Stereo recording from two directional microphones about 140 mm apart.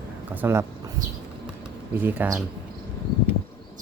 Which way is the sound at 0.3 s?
15° right (ahead or behind).